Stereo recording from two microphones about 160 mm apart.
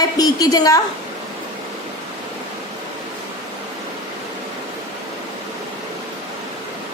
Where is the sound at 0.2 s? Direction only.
25° left (ahead or behind).